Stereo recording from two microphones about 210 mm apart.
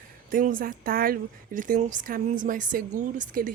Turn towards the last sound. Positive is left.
turn(degrees=-40)  # may be behind; listen again after turning